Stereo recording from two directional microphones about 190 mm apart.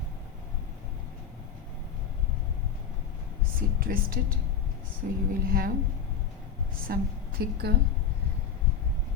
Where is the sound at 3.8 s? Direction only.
50° right (ahead or behind).